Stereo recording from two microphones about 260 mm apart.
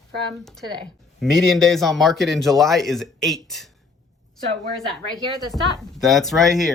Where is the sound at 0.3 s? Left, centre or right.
Centre.